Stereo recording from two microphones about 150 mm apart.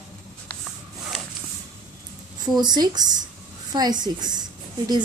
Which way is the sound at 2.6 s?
30° right (ahead or behind).